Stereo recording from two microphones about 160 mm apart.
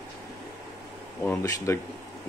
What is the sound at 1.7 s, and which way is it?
Speech, 20° left (ahead or behind).